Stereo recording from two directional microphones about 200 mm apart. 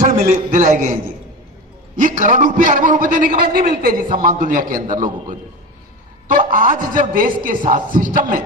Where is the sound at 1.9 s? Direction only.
40° right (ahead or behind).